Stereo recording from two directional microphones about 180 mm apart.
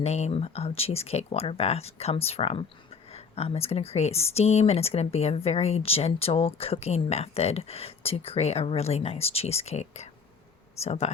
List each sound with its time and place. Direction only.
0.0 s speech: 35° left (ahead or behind)